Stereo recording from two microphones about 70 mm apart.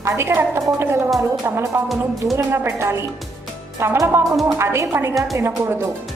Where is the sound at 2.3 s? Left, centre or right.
Right.